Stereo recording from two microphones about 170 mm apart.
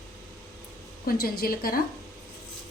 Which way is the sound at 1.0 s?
60° left (ahead or behind).